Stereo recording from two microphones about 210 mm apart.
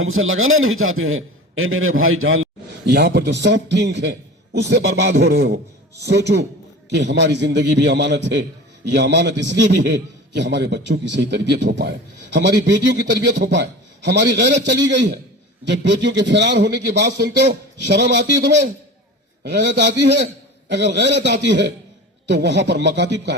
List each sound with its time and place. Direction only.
0.0 s a man's voice: 75° right (ahead or behind)
2.8 s a man's voice: 50° right (ahead or behind)